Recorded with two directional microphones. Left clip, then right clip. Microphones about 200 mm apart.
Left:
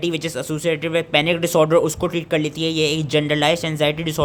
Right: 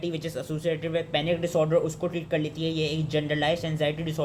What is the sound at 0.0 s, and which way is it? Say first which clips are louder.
Speech: left 8 dB; 35° left (ahead or behind).